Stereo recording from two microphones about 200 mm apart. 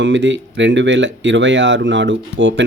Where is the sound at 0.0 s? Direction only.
65° right (ahead or behind).